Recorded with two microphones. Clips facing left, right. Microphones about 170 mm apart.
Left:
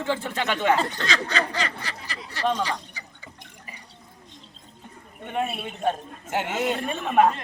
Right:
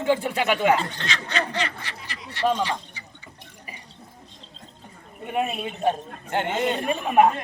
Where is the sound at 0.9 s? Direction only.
40° left (ahead or behind).